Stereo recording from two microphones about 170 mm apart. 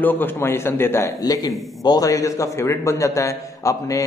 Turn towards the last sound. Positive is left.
turn(degrees=20)  # may be behind; listen again after turning